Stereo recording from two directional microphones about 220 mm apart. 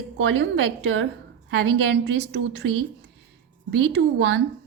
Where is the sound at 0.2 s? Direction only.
60° right (ahead or behind).